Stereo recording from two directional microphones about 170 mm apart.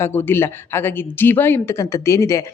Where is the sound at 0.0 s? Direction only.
10° left (ahead or behind).